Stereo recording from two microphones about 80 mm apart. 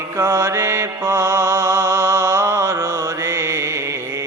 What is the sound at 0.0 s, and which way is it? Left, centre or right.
Mantra, right.